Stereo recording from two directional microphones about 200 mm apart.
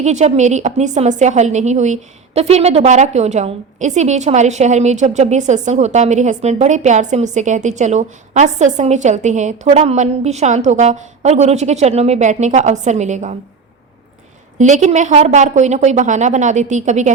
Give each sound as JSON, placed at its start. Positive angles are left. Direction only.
{"t": 0.0, "sound": "a woman's voice", "side_deg": -35}
{"t": 14.6, "sound": "a woman's voice", "side_deg": -35}